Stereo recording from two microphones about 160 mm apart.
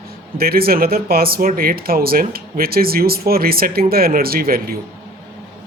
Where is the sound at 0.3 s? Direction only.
70° right (ahead or behind).